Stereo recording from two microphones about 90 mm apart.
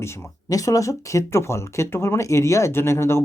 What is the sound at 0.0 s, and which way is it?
Speech, 30° left (ahead or behind).